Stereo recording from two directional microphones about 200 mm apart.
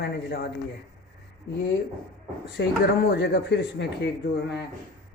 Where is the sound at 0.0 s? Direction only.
55° left (ahead or behind).